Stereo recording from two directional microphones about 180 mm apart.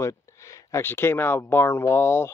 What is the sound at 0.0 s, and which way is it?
Speech, 15° left (ahead or behind).